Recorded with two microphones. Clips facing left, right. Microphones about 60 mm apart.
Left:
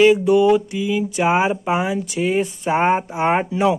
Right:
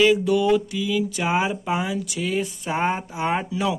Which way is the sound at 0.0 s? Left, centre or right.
Left.